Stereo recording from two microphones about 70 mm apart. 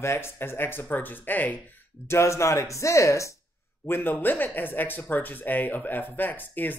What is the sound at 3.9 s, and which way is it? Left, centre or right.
Speech, left.